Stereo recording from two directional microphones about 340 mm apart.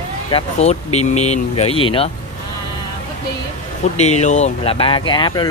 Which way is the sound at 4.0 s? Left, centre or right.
Centre.